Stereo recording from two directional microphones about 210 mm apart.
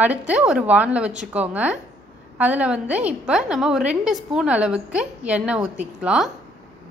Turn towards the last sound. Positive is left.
turn(degrees=-5)  # may be behind; listen again after turning